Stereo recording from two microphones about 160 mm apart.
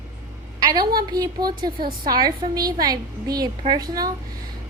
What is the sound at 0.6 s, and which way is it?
A woman's voice, 25° right (ahead or behind).